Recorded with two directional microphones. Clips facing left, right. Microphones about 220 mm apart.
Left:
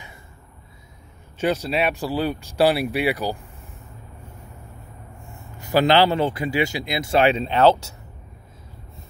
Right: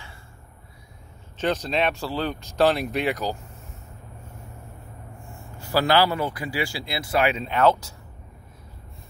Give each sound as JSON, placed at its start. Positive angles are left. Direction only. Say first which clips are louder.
{"t": 1.4, "sound": "speech", "louder": "left 2 dB", "side_deg": 10}
{"t": 5.3, "sound": "a man's voice", "louder": "left 4 dB", "side_deg": 20}